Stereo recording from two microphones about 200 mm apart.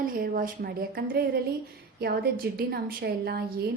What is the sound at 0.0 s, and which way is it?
A woman's voice, 45° right (ahead or behind).